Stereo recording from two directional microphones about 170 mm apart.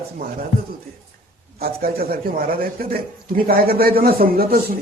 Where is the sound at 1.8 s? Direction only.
60° right (ahead or behind).